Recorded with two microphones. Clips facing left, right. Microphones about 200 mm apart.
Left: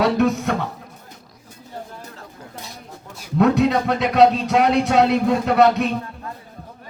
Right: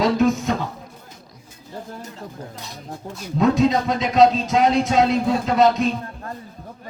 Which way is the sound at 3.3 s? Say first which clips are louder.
Left 1 dB; 65° left (ahead or behind).